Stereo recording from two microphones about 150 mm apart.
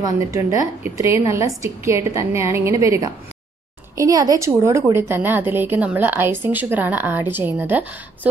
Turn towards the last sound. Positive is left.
turn(degrees=-10)  # may be behind; listen again after turning